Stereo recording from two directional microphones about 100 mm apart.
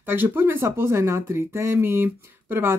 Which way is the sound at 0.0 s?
20° right (ahead or behind).